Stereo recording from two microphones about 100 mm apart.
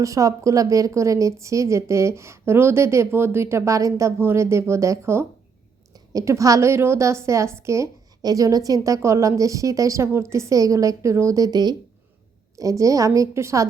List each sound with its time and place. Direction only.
0.0 s a woman's voice: 35° right (ahead or behind)